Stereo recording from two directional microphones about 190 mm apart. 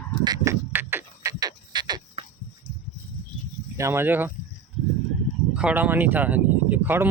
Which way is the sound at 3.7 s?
15° right (ahead or behind).